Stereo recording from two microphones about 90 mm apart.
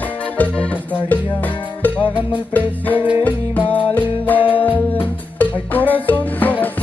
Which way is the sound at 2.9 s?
20° right (ahead or behind).